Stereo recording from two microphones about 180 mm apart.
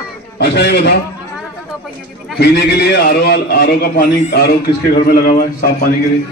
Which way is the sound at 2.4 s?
65° left (ahead or behind).